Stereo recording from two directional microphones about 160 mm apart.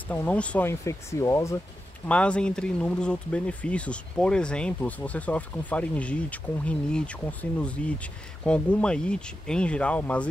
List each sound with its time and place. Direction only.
0.1 s speech: 10° left (ahead or behind)
2.0 s speech: 5° left (ahead or behind)